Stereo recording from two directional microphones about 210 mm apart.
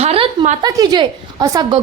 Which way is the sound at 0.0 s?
25° right (ahead or behind).